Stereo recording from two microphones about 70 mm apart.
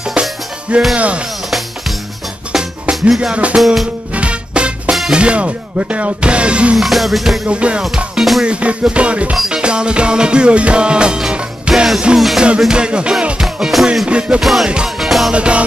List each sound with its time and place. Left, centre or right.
0.1 s music: centre
2.5 s music: centre
4.1 s music: centre
6.8 s music: centre
7.4 s music: centre
7.8 s music: centre
8.5 s music: centre
14.0 s music: centre
14.4 s music: centre
15.3 s music: centre